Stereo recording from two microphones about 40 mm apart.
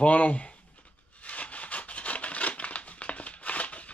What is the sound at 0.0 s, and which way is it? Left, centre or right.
Speech, left.